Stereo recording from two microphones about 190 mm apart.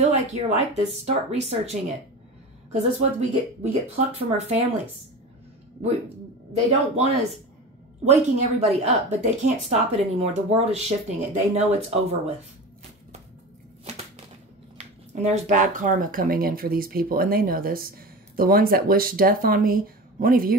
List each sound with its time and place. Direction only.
0.0 s speech: 35° right (ahead or behind)
8.0 s speech: 35° right (ahead or behind)
15.1 s speech: 35° right (ahead or behind)